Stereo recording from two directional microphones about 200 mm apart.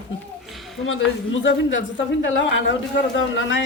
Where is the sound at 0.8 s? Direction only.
70° left (ahead or behind).